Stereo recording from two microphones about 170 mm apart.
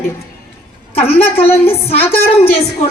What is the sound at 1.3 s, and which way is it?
Speech, 35° left (ahead or behind).